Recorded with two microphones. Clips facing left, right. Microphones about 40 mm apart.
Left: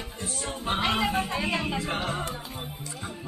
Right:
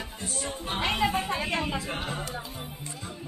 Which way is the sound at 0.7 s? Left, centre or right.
Left.